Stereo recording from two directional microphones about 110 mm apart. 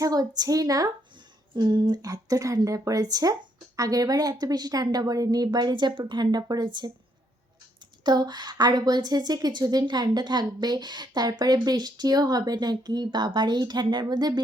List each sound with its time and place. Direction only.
0.0 s a woman's voice: 35° right (ahead or behind)
8.0 s a woman's voice: 40° right (ahead or behind)